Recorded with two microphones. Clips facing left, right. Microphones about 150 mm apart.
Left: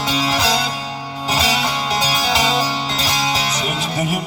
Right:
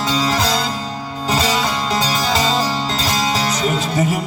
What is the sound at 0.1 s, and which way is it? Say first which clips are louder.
Music: right 1 dB; 45° right (ahead or behind).